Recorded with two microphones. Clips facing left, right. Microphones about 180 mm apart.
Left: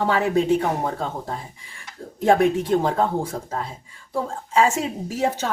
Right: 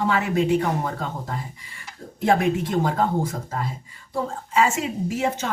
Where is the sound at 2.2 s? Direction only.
35° left (ahead or behind).